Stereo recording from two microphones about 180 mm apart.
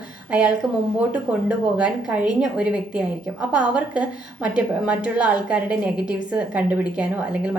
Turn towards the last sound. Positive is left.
turn(degrees=-5)  # may be behind; listen again after turning